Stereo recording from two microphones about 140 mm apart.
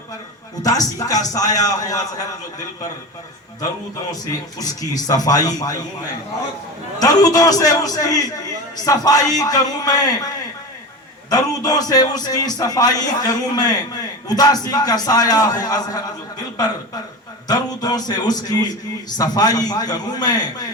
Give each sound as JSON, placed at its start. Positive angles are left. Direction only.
{"t": 0.6, "sound": "a man's voice", "side_deg": 25}
{"t": 4.1, "sound": "a man's voice", "side_deg": 25}
{"t": 7.0, "sound": "a man's voice", "side_deg": 25}